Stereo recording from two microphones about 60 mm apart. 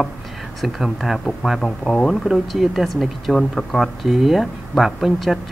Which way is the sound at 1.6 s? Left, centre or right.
Centre.